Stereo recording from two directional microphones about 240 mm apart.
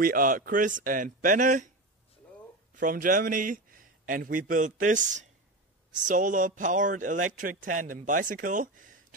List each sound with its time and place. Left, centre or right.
0.0 s speech: right
2.7 s a man's voice: right